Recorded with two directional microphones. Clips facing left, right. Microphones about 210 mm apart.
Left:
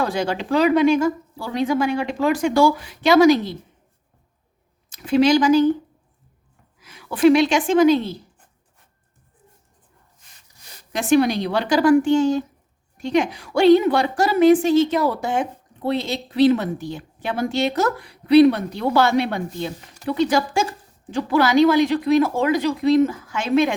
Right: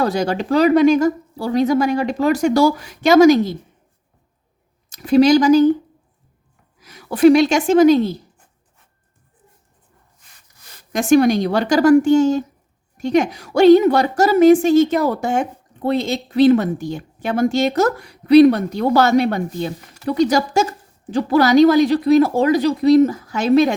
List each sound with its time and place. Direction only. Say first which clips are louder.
0.0 s speech: right 4 dB; 40° right (ahead or behind)
4.9 s speech: right 4 dB; 40° right (ahead or behind)
6.7 s a woman's voice: right 5 dB; 40° right (ahead or behind)
10.9 s a woman's voice: right 4 dB; 45° right (ahead or behind)